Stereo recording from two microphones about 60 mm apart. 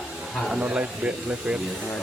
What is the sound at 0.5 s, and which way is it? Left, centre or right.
Speech, right.